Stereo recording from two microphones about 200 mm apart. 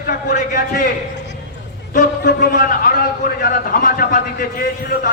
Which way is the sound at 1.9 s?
50° left (ahead or behind).